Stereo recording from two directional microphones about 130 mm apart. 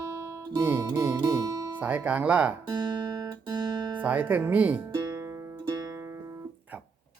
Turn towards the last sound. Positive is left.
turn(degrees=-20)  # may be behind; listen again after turning